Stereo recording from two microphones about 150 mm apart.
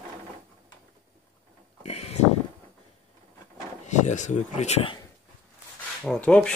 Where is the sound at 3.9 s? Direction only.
55° left (ahead or behind).